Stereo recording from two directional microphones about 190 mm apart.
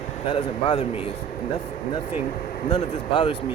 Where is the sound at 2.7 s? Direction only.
25° left (ahead or behind).